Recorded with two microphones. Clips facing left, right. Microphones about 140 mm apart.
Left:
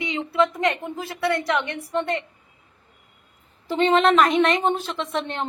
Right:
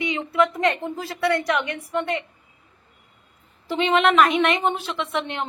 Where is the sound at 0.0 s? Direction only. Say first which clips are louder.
Right 1 dB; 25° left (ahead or behind).